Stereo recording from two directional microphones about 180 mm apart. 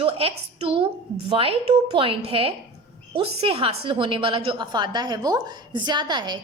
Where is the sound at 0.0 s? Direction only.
30° right (ahead or behind).